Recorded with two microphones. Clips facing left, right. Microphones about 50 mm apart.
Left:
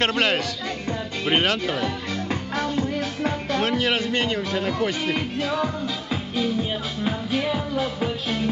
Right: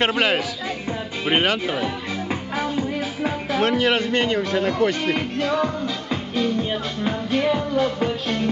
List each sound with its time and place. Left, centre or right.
0.0 s speech: centre